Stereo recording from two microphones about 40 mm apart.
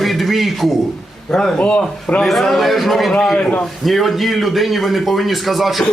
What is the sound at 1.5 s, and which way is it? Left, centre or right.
Speech, left.